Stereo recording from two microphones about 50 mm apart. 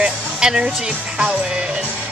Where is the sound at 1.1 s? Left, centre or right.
Right.